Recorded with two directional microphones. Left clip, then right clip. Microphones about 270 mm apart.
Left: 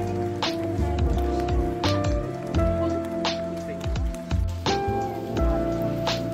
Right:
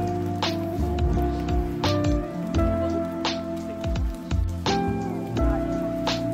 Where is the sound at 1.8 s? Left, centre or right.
Centre.